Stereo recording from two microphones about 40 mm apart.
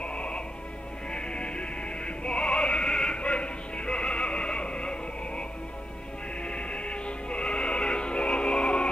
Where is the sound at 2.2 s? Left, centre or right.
Left.